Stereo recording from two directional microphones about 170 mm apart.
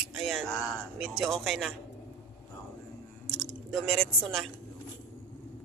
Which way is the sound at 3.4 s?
Centre (ahead or behind).